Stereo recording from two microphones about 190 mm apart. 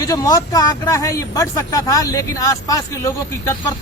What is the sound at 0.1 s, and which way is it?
Speech, 20° left (ahead or behind).